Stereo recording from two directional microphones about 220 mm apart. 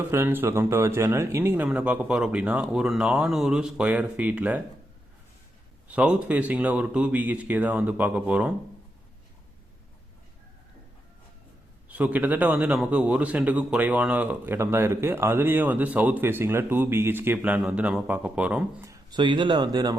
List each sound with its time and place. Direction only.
0.0 s a man's voice: 10° right (ahead or behind)
5.9 s a man's voice: 5° right (ahead or behind)
11.9 s a man's voice: 5° right (ahead or behind)
19.1 s speech: 20° right (ahead or behind)